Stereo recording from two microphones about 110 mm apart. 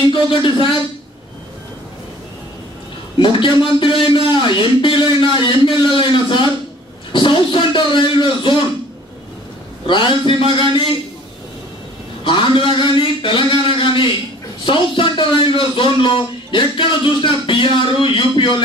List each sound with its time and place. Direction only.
0.1 s a man's voice: 50° left (ahead or behind)
3.2 s a man's voice: 50° left (ahead or behind)
7.1 s a sound: 50° left (ahead or behind)
9.8 s a man's voice: 50° left (ahead or behind)
12.3 s a man's voice: 50° left (ahead or behind)